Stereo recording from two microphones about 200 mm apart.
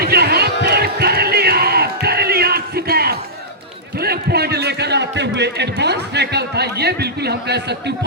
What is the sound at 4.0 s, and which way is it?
A man's voice, 50° right (ahead or behind).